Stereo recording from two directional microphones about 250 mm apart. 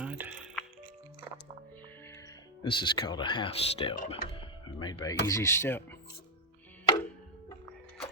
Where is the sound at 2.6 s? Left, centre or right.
Centre.